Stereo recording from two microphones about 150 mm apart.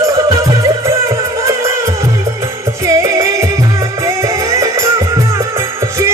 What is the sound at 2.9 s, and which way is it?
Music, 20° right (ahead or behind).